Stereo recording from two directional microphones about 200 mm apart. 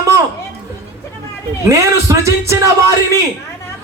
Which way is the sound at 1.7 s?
15° right (ahead or behind).